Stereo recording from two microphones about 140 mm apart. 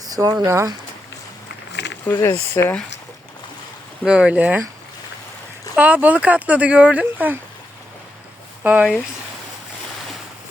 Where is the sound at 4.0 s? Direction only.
5° right (ahead or behind).